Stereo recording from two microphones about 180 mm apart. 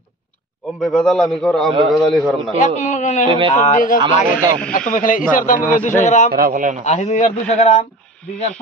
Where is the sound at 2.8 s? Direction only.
40° left (ahead or behind).